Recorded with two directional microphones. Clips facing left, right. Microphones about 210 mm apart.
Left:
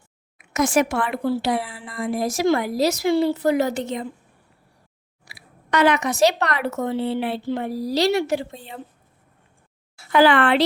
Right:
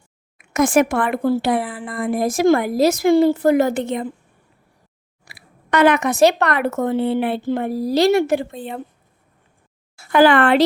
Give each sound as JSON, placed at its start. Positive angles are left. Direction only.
{"t": 0.3, "sound": "speech", "side_deg": -55}
{"t": 5.2, "sound": "speech", "side_deg": -55}
{"t": 10.0, "sound": "speech", "side_deg": -50}